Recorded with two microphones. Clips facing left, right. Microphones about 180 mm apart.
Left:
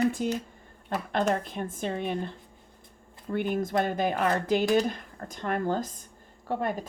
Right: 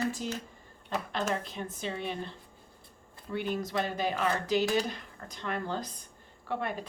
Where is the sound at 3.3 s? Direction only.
50° left (ahead or behind).